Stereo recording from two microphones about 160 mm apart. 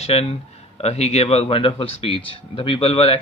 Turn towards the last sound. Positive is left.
turn(degrees=35)  # may be behind; listen again after turning